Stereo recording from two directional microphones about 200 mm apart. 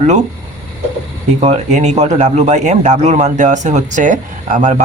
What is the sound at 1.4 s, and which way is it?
Speech, 35° right (ahead or behind).